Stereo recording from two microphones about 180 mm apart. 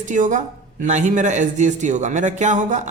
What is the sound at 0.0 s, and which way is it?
A man's voice, 45° right (ahead or behind).